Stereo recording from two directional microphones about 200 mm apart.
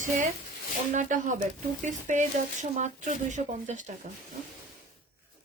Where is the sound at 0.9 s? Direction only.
40° right (ahead or behind).